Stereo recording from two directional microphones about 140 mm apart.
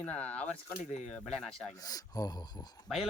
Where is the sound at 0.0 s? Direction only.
10° left (ahead or behind).